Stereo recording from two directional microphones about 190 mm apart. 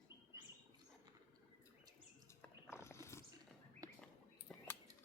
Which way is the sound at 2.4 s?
15° left (ahead or behind).